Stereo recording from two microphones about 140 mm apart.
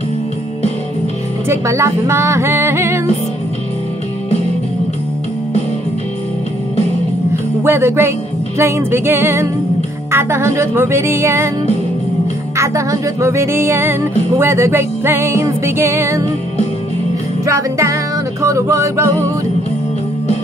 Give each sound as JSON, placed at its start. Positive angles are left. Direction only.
{"t": 1.5, "sound": "music", "side_deg": -20}
{"t": 7.6, "sound": "music", "side_deg": -15}
{"t": 12.5, "sound": "music", "side_deg": -20}
{"t": 17.5, "sound": "music", "side_deg": -20}